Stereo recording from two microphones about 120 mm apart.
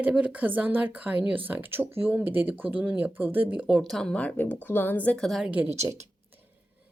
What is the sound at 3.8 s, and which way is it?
A woman's voice, centre (ahead or behind).